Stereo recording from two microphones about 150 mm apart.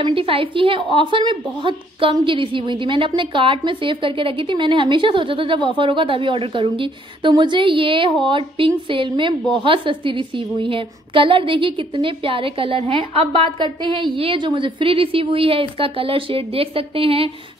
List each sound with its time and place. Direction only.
0.0 s a woman's voice: 35° right (ahead or behind)